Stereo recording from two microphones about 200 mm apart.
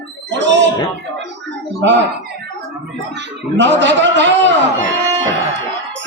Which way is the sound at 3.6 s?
65° right (ahead or behind).